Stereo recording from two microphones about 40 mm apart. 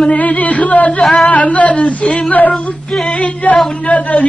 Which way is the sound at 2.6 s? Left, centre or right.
Left.